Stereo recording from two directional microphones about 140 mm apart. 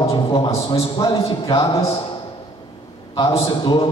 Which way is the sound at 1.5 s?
40° left (ahead or behind).